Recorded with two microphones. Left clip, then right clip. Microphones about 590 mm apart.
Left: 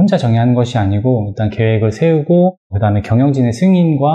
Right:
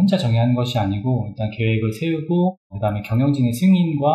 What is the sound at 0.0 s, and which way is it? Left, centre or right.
Speech, left.